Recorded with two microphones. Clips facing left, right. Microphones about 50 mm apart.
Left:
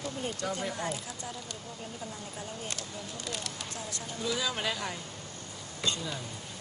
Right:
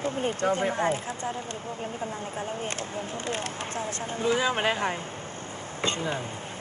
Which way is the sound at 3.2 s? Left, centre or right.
Right.